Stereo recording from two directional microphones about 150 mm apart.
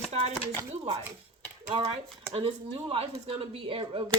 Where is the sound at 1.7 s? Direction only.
30° right (ahead or behind).